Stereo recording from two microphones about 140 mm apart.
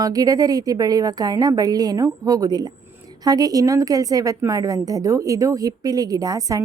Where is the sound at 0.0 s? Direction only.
25° right (ahead or behind).